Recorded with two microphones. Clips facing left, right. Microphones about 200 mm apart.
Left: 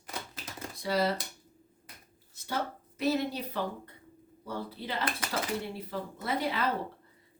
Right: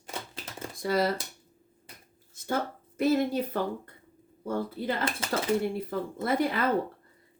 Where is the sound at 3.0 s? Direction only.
50° right (ahead or behind).